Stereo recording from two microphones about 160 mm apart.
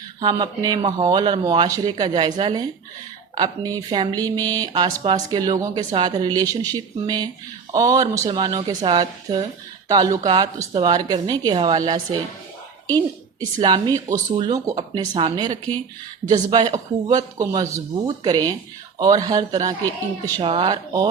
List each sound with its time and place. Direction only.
0.2 s speech: 30° right (ahead or behind)
13.4 s speech: 30° right (ahead or behind)